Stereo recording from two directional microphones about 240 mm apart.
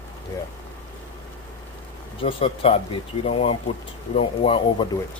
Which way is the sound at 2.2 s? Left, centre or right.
Left.